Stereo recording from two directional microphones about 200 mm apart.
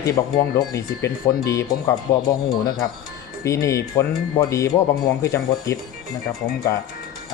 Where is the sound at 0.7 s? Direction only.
15° left (ahead or behind).